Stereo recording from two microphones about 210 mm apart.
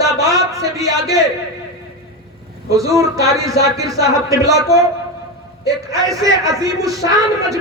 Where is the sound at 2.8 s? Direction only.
15° right (ahead or behind).